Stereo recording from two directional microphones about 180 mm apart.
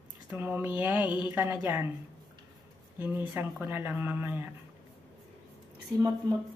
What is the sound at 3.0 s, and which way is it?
Speech, 10° right (ahead or behind).